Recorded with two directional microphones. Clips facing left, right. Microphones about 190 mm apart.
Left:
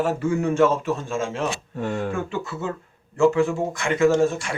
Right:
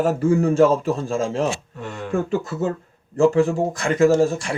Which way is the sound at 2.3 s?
40° right (ahead or behind).